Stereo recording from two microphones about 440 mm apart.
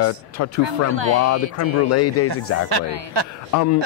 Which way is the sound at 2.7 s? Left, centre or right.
Right.